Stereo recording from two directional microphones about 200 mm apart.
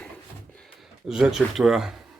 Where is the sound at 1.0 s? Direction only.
5° right (ahead or behind).